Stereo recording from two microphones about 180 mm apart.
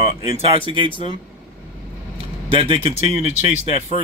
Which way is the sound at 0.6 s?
30° right (ahead or behind).